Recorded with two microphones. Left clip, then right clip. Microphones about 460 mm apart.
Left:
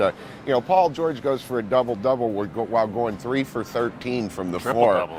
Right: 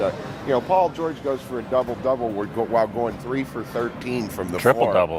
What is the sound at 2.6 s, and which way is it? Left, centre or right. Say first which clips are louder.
Speech: right 2 dB; left.